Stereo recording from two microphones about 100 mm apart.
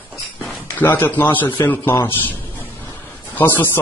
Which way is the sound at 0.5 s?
20° left (ahead or behind).